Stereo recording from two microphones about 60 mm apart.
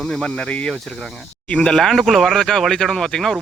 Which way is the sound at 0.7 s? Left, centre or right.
Centre.